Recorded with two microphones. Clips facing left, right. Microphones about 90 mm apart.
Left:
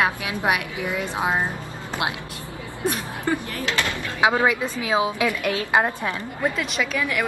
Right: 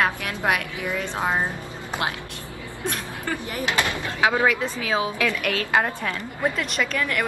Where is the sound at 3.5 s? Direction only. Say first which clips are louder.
Right 1 dB; 20° right (ahead or behind).